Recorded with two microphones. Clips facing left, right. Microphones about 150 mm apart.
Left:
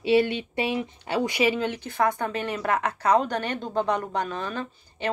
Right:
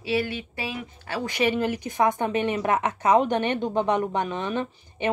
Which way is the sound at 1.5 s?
10° right (ahead or behind).